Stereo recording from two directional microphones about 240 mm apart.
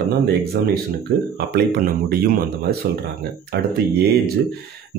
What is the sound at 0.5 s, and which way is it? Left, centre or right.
Speech, right.